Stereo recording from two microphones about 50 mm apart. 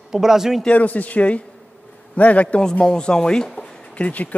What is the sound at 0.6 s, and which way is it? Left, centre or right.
Speech, left.